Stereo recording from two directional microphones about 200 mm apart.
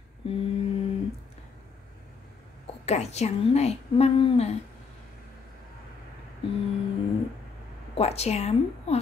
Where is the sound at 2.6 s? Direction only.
30° left (ahead or behind).